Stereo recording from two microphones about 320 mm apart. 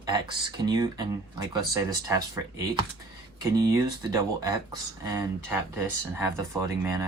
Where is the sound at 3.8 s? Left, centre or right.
Centre.